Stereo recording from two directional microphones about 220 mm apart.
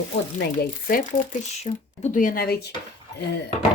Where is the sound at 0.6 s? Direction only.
40° left (ahead or behind).